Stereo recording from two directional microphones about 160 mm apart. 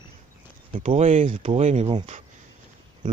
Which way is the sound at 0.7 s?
45° right (ahead or behind).